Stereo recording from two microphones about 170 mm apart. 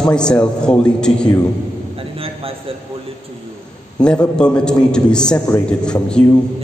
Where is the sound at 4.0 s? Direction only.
5° left (ahead or behind).